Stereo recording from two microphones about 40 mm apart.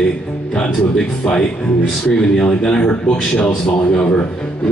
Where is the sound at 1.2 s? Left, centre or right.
Left.